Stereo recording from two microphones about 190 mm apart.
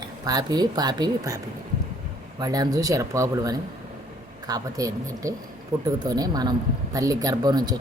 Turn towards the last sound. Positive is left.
turn(degrees=-20)  # may be behind; listen again after turning